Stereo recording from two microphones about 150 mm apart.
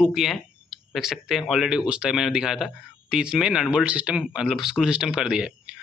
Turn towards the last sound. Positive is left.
turn(degrees=-5)  # may be behind; listen again after turning